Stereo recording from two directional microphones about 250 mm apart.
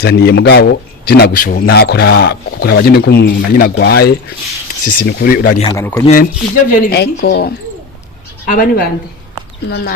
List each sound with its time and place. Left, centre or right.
0.0 s a man's voice: left
5.6 s speech: centre
6.7 s a man's voice: left